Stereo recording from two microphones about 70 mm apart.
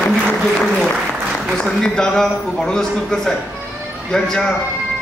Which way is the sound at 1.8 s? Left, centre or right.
Centre.